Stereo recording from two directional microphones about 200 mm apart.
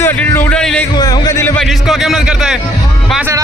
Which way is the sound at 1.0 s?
20° left (ahead or behind).